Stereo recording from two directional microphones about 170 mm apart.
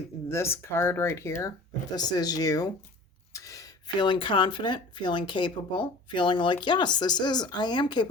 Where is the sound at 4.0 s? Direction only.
25° left (ahead or behind).